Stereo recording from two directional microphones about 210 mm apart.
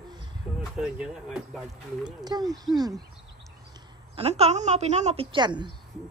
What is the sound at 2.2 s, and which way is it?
Speech, 20° right (ahead or behind).